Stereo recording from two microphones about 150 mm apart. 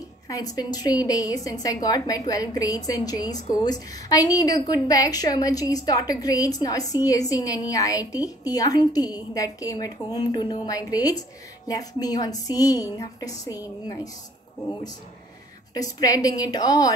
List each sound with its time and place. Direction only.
0.3 s a woman's voice: 25° left (ahead or behind)
15.7 s a woman's voice: 25° left (ahead or behind)